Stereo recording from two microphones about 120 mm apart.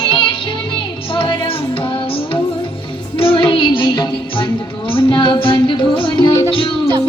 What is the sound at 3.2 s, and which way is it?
Music, 45° left (ahead or behind).